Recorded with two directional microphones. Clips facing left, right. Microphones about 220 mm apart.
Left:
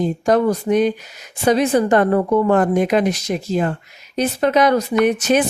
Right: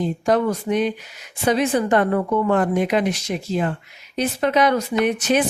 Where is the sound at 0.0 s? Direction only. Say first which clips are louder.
Left 3 dB; 40° left (ahead or behind).